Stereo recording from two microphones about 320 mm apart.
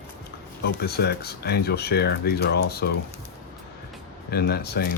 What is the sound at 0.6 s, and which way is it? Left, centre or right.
Speech, left.